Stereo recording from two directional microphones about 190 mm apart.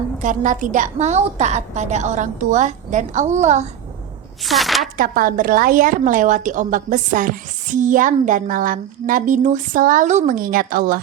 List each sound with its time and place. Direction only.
0.2 s a woman's voice: 40° right (ahead or behind)
4.4 s a woman's voice: centre (ahead or behind)
4.9 s a woman's voice: 45° right (ahead or behind)